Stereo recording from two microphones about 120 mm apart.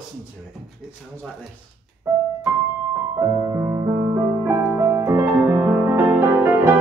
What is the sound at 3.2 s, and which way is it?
Music, 30° right (ahead or behind).